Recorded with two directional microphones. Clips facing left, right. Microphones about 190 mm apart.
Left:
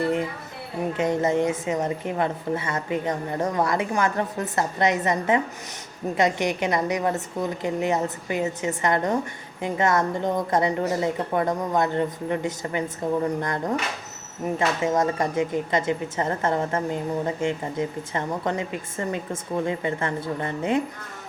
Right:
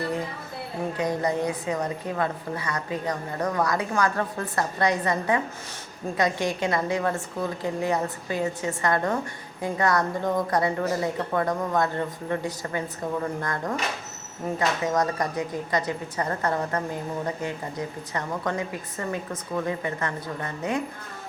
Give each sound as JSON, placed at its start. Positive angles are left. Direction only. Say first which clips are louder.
{"t": 0.9, "sound": "a woman's voice", "louder": "left 4 dB", "side_deg": 25}
{"t": 14.8, "sound": "a woman's voice", "louder": "left 2 dB", "side_deg": 25}